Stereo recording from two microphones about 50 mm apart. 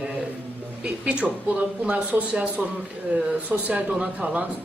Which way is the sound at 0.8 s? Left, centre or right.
Right.